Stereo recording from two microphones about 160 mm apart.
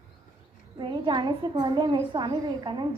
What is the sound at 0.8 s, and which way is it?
A woman's voice, 30° right (ahead or behind).